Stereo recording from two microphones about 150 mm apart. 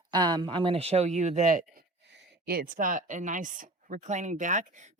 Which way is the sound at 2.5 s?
75° right (ahead or behind).